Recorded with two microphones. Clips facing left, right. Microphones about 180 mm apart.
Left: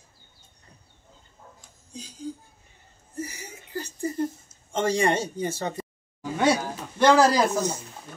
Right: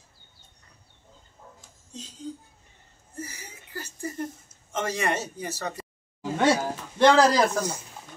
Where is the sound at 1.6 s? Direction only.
Centre (ahead or behind).